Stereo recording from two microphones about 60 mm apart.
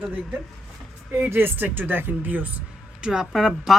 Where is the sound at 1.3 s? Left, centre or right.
Right; by 3.2 s centre.